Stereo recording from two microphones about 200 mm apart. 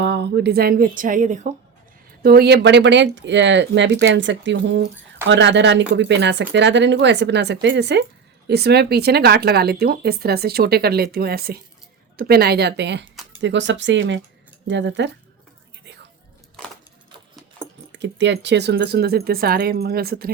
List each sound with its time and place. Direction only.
0.0 s speech: 55° right (ahead or behind); by 1.5 s 40° right (ahead or behind)
2.2 s speech: 50° right (ahead or behind)
16.6 s a sound: 5° left (ahead or behind)
17.9 s speech: 60° right (ahead or behind)